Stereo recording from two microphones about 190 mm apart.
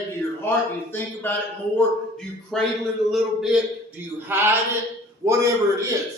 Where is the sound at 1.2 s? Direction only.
10° left (ahead or behind).